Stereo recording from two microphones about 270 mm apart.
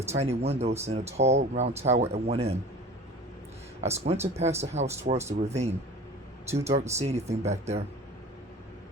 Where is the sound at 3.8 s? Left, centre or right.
Right.